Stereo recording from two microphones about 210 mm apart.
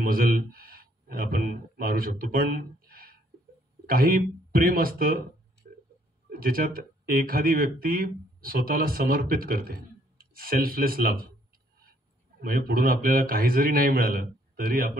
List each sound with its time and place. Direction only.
0.0 s speech: 45° right (ahead or behind)
6.3 s speech: 45° right (ahead or behind)
12.4 s speech: 45° right (ahead or behind)